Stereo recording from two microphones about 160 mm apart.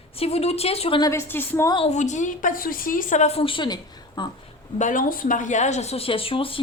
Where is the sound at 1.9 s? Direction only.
50° left (ahead or behind); by 4.3 s 30° left (ahead or behind).